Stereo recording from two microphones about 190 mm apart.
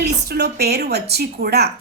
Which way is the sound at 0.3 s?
60° right (ahead or behind).